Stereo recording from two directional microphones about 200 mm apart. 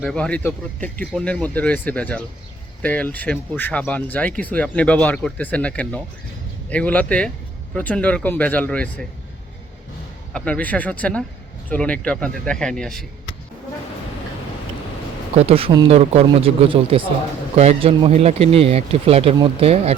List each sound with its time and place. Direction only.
0.0 s speech: 5° left (ahead or behind)
10.3 s speech: 5° left (ahead or behind)
15.4 s speech: 30° right (ahead or behind)